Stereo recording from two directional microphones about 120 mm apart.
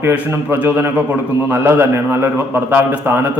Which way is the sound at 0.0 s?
15° right (ahead or behind).